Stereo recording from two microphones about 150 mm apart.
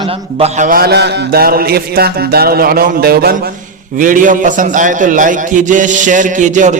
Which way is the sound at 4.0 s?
65° right (ahead or behind).